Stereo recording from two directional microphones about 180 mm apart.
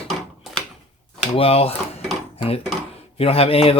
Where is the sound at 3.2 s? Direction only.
30° left (ahead or behind).